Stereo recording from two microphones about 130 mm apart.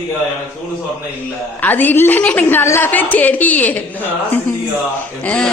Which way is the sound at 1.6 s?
15° left (ahead or behind).